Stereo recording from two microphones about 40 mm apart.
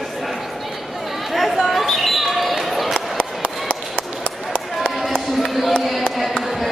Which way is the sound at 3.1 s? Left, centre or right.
Left.